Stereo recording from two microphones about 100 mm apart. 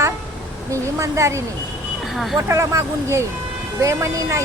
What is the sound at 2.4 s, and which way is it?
A woman's voice, 30° right (ahead or behind).